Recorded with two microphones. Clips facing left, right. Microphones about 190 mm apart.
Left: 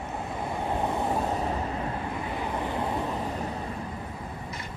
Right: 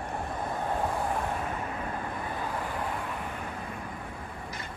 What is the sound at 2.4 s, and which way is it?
Vehicle, 20° left (ahead or behind).